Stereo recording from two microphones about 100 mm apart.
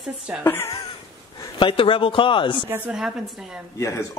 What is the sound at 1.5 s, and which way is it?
A man's voice, 60° left (ahead or behind).